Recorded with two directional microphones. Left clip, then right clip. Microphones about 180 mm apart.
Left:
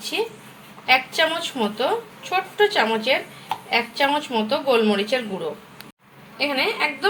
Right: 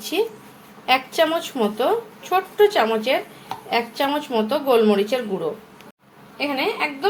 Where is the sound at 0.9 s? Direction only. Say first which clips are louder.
Even; 20° right (ahead or behind).